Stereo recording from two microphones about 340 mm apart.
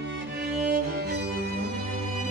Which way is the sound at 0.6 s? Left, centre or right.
Right.